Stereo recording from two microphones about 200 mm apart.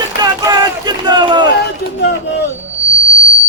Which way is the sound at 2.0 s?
60° left (ahead or behind).